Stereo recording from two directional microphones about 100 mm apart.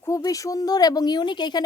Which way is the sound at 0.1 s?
35° left (ahead or behind).